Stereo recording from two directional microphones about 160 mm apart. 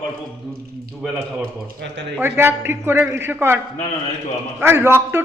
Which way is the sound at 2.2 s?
15° right (ahead or behind).